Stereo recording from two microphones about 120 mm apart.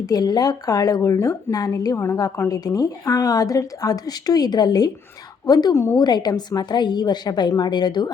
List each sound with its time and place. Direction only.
0.0 s a woman's voice: 30° left (ahead or behind)
6.0 s a woman's voice: 35° left (ahead or behind)